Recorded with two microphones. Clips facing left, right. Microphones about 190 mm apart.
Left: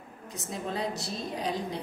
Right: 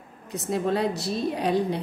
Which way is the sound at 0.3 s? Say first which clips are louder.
Right 10 dB; 65° right (ahead or behind).